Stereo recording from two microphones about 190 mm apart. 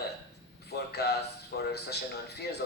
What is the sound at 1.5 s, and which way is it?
Speech, 55° left (ahead or behind).